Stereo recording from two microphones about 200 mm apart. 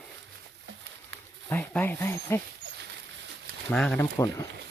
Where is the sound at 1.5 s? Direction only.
10° left (ahead or behind).